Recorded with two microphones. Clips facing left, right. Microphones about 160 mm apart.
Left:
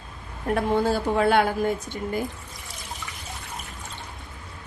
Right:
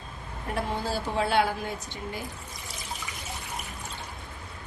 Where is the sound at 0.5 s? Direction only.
55° left (ahead or behind).